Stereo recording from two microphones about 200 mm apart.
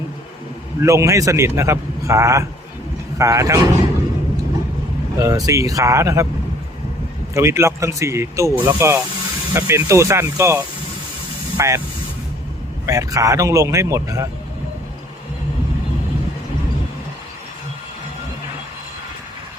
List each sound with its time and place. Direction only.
0.8 s a man's voice: 15° right (ahead or behind)
5.1 s a man's voice: 15° right (ahead or behind)
7.3 s a man's voice: 15° right (ahead or behind)
12.8 s a man's voice: 15° right (ahead or behind)